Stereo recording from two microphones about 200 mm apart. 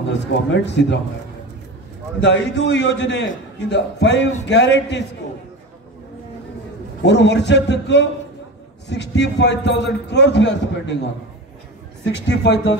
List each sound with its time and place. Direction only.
0.1 s a man's voice: 60° left (ahead or behind)
2.2 s a man's voice: 65° left (ahead or behind)
7.0 s a man's voice: 60° left (ahead or behind)
12.0 s a man's voice: 60° left (ahead or behind)